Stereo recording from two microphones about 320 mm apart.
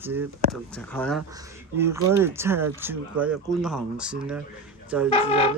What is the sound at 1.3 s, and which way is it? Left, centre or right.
Speech, centre.